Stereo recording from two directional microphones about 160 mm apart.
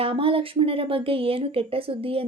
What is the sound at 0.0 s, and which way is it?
Speech, 35° right (ahead or behind).